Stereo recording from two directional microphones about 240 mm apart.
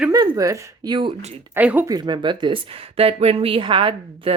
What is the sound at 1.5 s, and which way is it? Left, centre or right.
A woman's voice, centre.